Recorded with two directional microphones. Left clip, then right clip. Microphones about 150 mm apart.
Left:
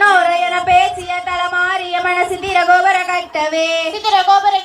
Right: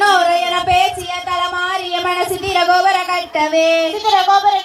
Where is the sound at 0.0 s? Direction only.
35° left (ahead or behind).